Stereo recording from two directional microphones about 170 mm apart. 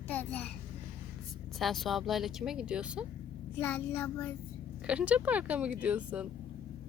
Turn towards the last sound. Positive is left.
turn(degrees=-10)  # may be behind; listen again after turning